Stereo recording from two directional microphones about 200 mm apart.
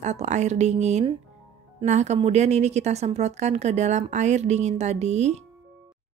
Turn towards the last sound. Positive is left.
turn(degrees=-35)  # may be behind; listen again after turning